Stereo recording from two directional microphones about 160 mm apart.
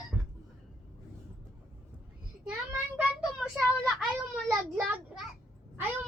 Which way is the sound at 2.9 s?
5° right (ahead or behind).